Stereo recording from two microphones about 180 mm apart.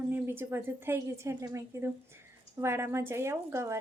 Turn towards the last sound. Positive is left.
turn(degrees=-15)  # may be behind; listen again after turning